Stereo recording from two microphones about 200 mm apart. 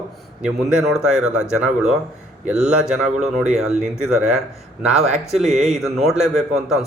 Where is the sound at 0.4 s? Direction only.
5° right (ahead or behind).